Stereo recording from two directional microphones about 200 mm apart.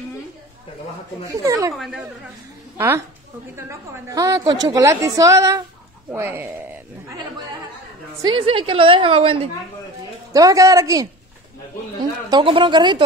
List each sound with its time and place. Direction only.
1.3 s a woman's voice: 15° right (ahead or behind)
1.8 s a woman's voice: centre (ahead or behind)
3.5 s a woman's voice: 15° right (ahead or behind)
8.2 s a woman's voice: 25° right (ahead or behind)
10.3 s a woman's voice: 15° right (ahead or behind)
12.3 s a woman's voice: 25° right (ahead or behind)